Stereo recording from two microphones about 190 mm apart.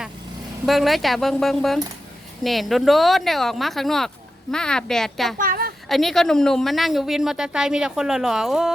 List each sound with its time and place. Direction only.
0.6 s a woman's voice: centre (ahead or behind)
5.4 s a sound: 50° right (ahead or behind)
5.9 s a woman's voice: centre (ahead or behind)